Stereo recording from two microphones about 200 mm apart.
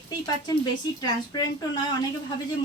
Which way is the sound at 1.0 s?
20° left (ahead or behind).